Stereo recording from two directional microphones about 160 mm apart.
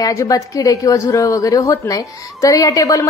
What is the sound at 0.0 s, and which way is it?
A woman's voice, 20° left (ahead or behind).